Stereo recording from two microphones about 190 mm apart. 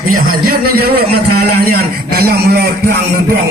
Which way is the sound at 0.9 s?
55° right (ahead or behind).